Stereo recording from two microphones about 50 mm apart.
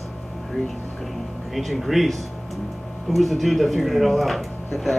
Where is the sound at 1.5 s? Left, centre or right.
Centre.